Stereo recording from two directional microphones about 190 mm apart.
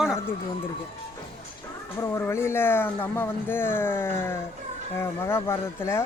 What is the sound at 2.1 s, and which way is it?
Speech, 15° left (ahead or behind).